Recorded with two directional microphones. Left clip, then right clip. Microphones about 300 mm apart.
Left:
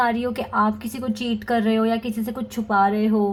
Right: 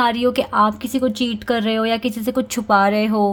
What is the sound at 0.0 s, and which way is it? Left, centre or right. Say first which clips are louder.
Speech: right 5 dB; right.